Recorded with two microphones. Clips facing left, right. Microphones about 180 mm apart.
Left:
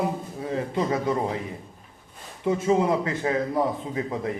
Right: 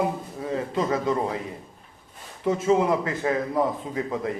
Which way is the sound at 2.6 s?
25° left (ahead or behind).